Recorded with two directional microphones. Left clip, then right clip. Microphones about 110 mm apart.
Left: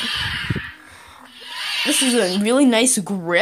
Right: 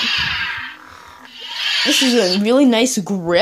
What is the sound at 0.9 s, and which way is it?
Music, 5° right (ahead or behind).